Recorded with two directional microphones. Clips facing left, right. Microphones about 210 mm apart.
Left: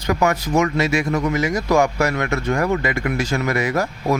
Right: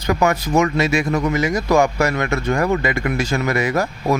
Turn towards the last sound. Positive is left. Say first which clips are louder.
# right 1 dB
turn(degrees=-25)  # may be behind; listen again after turning